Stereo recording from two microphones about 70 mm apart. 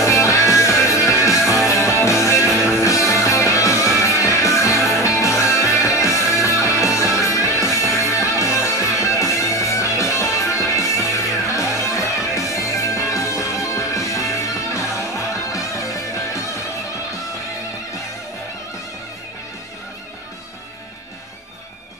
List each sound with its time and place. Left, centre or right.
0.0 s music: left